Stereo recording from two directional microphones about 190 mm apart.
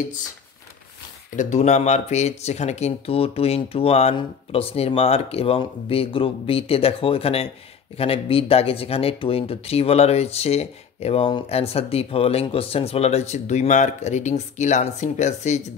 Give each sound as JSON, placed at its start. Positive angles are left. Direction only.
{"t": 1.3, "sound": "speech", "side_deg": 40}